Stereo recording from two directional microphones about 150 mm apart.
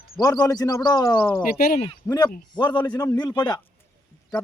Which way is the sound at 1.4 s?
80° left.